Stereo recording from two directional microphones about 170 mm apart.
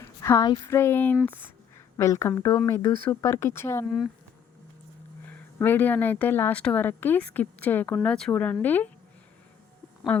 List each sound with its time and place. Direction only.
0.0 s a sound: 15° left (ahead or behind)
0.7 s speech: 15° left (ahead or behind)
3.8 s speech: centre (ahead or behind)
5.2 s speech: 10° left (ahead or behind)
10.1 s speech: 10° left (ahead or behind)